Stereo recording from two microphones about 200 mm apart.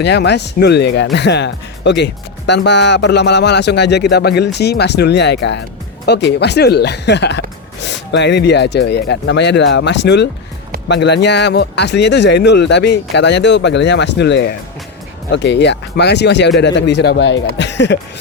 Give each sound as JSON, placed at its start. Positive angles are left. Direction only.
{"t": 0.0, "sound": "speech", "side_deg": 55}